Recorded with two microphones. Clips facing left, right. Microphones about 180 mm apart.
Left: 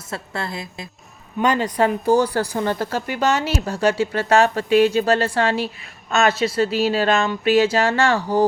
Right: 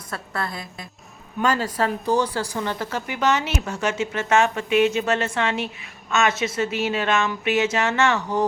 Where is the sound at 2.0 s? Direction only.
30° left (ahead or behind).